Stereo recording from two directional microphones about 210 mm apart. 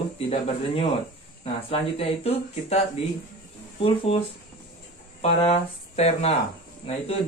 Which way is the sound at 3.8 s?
25° left (ahead or behind).